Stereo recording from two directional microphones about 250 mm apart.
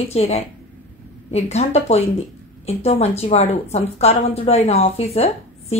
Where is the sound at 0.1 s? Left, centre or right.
Left.